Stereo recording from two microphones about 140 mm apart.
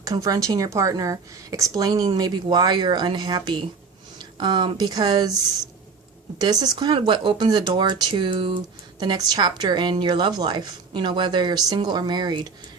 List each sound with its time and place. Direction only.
0.0 s speech: 25° right (ahead or behind)
6.4 s a woman's voice: 30° right (ahead or behind)
9.0 s a woman's voice: 30° right (ahead or behind)